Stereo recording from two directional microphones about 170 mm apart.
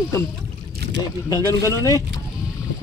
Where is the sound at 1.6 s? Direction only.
20° left (ahead or behind).